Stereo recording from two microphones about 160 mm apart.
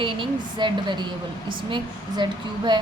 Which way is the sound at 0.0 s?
30° right (ahead or behind).